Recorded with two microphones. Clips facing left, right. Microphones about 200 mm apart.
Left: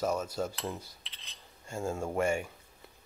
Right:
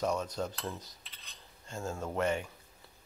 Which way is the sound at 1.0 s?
45° right (ahead or behind).